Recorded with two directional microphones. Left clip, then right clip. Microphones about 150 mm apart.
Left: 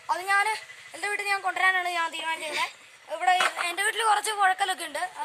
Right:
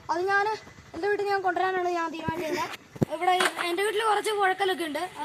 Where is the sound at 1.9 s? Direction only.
5° left (ahead or behind).